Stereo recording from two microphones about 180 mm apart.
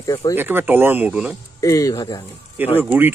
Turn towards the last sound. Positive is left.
turn(degrees=-10)  # may be behind; listen again after turning